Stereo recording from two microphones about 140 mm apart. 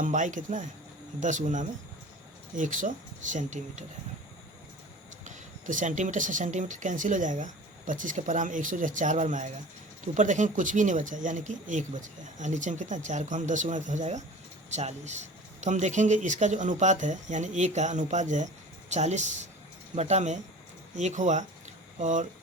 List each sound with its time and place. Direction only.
0.0 s a man's voice: 65° right (ahead or behind)
5.2 s speech: 65° right (ahead or behind)